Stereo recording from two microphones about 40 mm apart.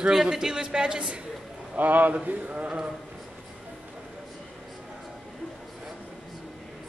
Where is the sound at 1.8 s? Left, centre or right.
Right.